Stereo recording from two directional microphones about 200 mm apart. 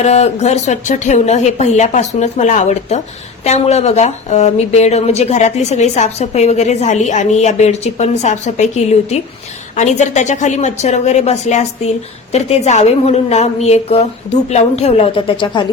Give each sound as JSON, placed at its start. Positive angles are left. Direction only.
{"t": 0.0, "sound": "a woman's voice", "side_deg": 35}